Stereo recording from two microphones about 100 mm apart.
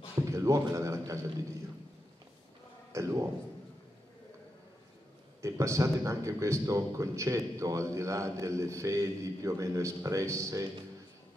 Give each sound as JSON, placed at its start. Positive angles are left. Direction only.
{"t": 0.3, "sound": "a man's voice", "side_deg": -30}
{"t": 2.9, "sound": "speech", "side_deg": -30}
{"t": 5.4, "sound": "a man's voice", "side_deg": -30}